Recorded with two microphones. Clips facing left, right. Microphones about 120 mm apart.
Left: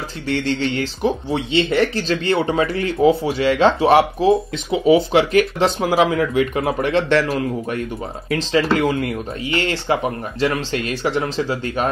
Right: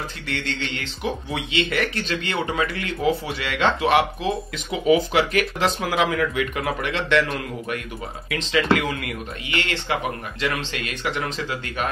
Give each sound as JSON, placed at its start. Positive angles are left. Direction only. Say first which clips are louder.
{"t": 0.3, "sound": "speech", "louder": "left 10 dB", "side_deg": 35}
{"t": 8.3, "sound": "speech", "louder": "left 3 dB", "side_deg": 35}